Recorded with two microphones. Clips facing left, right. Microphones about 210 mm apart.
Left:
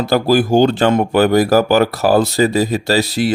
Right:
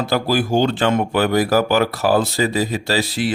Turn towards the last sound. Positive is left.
turn(degrees=40)  # may be behind; listen again after turning